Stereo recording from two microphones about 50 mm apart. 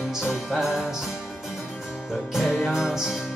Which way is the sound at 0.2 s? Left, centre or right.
Centre.